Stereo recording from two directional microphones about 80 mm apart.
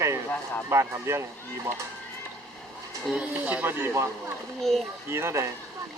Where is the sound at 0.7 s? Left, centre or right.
Right.